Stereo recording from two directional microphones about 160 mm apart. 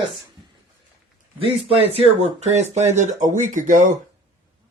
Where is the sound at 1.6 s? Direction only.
40° right (ahead or behind).